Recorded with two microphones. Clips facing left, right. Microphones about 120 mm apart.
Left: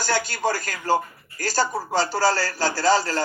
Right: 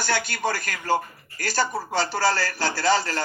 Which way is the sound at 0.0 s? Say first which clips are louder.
Left 2 dB; 40° left (ahead or behind).